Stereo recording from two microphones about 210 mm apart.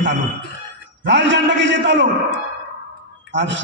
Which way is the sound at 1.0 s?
60° right (ahead or behind).